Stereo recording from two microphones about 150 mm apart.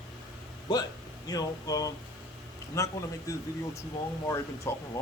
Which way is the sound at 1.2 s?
25° left (ahead or behind).